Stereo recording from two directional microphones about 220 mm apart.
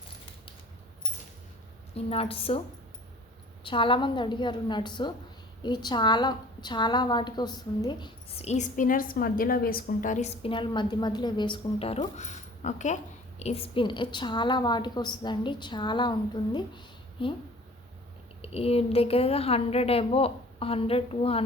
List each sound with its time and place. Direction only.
2.0 s a woman's voice: 25° left (ahead or behind)
3.6 s a woman's voice: 25° left (ahead or behind)
18.4 s a woman's voice: 25° left (ahead or behind)